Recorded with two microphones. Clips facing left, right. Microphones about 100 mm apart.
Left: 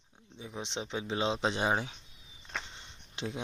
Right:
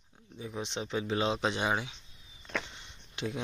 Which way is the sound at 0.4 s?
20° left (ahead or behind).